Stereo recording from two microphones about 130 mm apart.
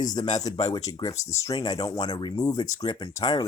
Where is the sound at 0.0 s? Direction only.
30° left (ahead or behind).